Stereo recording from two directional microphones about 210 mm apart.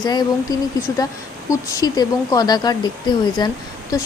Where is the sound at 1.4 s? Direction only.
15° left (ahead or behind).